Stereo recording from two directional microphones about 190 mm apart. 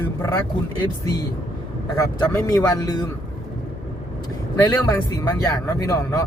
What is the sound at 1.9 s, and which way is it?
Speech, 20° left (ahead or behind).